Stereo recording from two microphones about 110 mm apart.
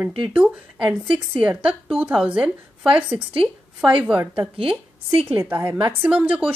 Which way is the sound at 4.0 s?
10° right (ahead or behind).